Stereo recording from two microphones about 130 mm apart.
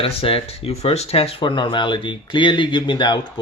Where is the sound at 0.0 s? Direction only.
45° left (ahead or behind).